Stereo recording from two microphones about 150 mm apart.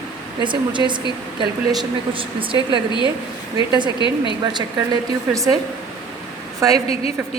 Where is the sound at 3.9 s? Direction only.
30° left (ahead or behind).